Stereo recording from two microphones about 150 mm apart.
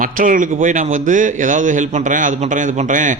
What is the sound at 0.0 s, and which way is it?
A man's voice, 60° right (ahead or behind).